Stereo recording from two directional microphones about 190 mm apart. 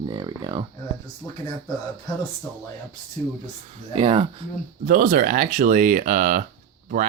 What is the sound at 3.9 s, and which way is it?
Speech, 30° right (ahead or behind).